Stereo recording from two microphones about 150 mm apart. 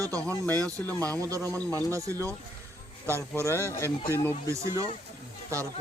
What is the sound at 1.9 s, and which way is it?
Speech, 20° right (ahead or behind).